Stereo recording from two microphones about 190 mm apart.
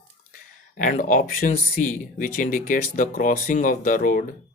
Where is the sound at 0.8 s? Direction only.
45° left (ahead or behind).